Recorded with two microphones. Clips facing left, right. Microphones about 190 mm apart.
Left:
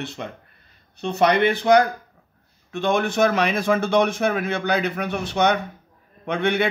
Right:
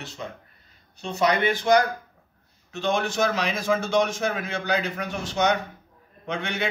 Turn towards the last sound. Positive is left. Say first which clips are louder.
# left 7 dB
turn(degrees=60)  # may be behind; listen again after turning